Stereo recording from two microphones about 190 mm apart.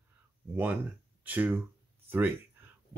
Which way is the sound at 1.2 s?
10° right (ahead or behind).